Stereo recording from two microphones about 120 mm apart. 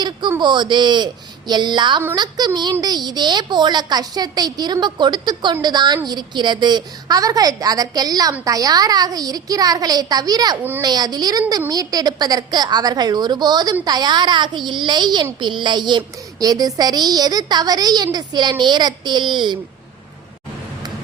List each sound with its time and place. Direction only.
0.0 s a child's voice: 40° right (ahead or behind)
10.6 s a child's voice: 15° right (ahead or behind)
10.8 s a child's voice: 35° right (ahead or behind)